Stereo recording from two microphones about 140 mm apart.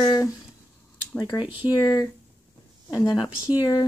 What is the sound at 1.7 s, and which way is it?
Speech, 25° left (ahead or behind).